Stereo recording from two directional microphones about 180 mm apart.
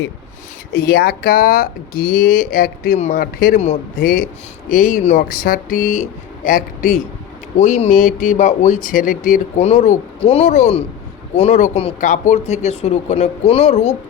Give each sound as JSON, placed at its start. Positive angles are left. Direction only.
{"t": 0.7, "sound": "speech", "side_deg": 55}
{"t": 11.9, "sound": "speech", "side_deg": 45}